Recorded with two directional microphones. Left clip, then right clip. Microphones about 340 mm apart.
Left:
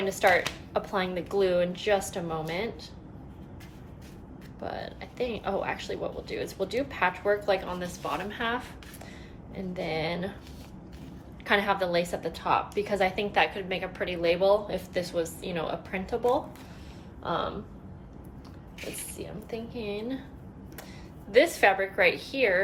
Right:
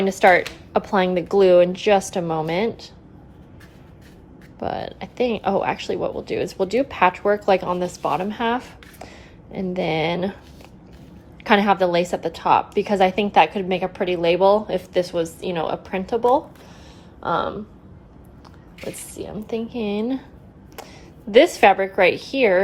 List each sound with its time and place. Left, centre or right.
0.1 s a woman's voice: centre
4.6 s a woman's voice: centre
11.4 s a woman's voice: centre
19.1 s a woman's voice: centre
21.2 s a woman's voice: centre